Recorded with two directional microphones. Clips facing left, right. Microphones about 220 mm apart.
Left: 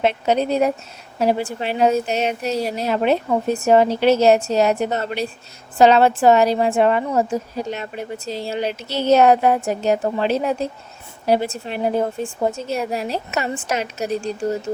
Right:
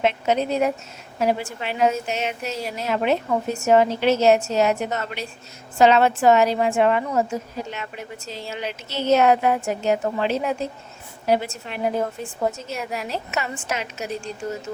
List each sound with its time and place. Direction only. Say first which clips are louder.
0.0 s a woman's voice: left 3 dB; 35° left (ahead or behind)